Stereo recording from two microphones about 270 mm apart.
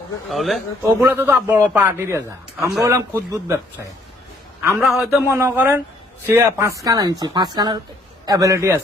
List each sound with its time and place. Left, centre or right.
0.3 s a man's voice: centre
4.8 s a man's voice: centre